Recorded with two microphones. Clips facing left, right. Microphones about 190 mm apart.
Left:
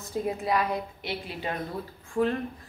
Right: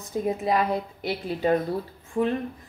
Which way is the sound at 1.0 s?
40° right (ahead or behind).